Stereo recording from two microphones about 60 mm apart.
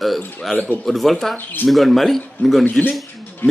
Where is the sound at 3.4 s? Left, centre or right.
Left.